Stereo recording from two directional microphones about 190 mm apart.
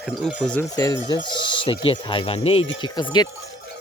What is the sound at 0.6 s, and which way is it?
Speech, 20° left (ahead or behind).